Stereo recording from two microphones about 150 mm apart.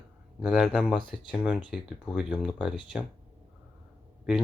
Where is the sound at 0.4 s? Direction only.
5° right (ahead or behind).